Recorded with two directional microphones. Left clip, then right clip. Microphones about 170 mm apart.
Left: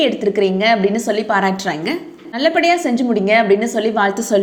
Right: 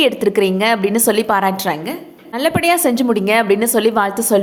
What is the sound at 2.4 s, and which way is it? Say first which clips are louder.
A woman's voice: left 1 dB; 30° right (ahead or behind).